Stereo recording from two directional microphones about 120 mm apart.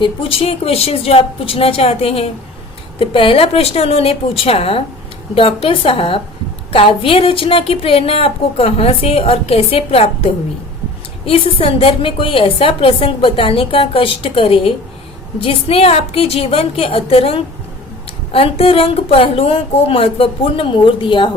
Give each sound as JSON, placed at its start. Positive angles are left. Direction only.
{"t": 0.0, "sound": "speech", "side_deg": 50}
{"t": 11.3, "sound": "speech", "side_deg": 50}